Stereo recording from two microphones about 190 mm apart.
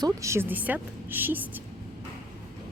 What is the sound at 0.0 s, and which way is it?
A woman's voice, 15° right (ahead or behind).